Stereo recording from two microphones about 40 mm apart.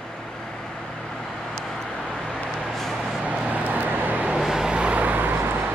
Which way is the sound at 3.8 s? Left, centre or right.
Right.